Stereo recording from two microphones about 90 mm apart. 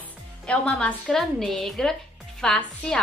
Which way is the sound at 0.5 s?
10° left (ahead or behind).